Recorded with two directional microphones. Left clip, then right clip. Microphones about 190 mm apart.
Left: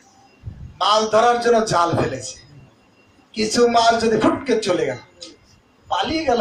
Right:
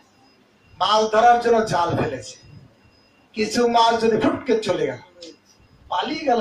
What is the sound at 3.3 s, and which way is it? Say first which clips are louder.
Speech: left 3 dB; 50° left (ahead or behind).